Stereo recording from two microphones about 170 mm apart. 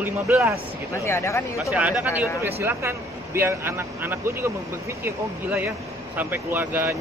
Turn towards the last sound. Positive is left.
turn(degrees=-10)  # may be behind; listen again after turning